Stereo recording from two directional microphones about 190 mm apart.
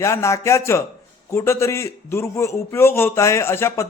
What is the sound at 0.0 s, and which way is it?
A man's voice, 15° left (ahead or behind).